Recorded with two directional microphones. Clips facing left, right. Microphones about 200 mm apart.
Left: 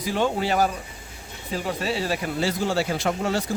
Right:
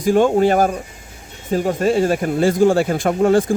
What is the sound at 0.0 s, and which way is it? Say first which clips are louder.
Speech: right 10 dB; 50° right (ahead or behind).